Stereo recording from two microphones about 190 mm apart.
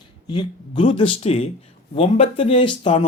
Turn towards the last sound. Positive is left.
turn(degrees=25)  # may be behind; listen again after turning